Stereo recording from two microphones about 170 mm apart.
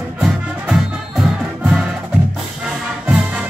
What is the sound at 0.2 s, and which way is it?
Music, centre (ahead or behind).